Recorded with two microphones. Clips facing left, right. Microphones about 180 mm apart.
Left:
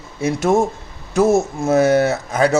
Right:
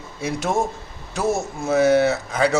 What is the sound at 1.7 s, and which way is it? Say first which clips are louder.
Speech: left 2 dB; 45° left (ahead or behind).